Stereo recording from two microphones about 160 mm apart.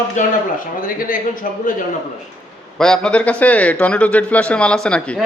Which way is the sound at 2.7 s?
5° left (ahead or behind).